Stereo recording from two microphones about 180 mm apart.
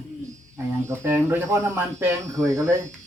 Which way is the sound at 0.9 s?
15° right (ahead or behind).